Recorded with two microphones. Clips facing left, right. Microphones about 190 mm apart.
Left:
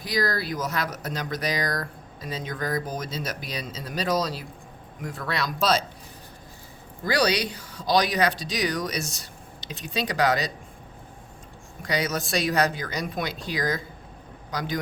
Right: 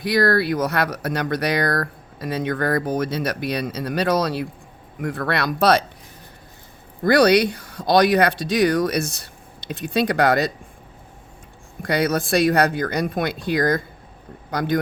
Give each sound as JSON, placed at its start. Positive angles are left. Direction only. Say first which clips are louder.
{"t": 0.0, "sound": "speech", "louder": "right 8 dB", "side_deg": -65}
{"t": 7.0, "sound": "speech", "louder": "right 9 dB", "side_deg": -55}
{"t": 11.8, "sound": "speech", "louder": "right 7 dB", "side_deg": -55}